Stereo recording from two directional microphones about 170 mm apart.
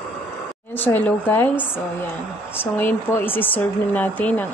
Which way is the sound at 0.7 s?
10° left (ahead or behind).